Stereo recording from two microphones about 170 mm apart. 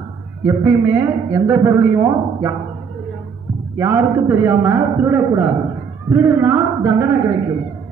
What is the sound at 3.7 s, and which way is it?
A man's voice, 15° right (ahead or behind).